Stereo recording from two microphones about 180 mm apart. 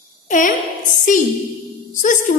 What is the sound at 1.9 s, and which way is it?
Speech, 45° left (ahead or behind).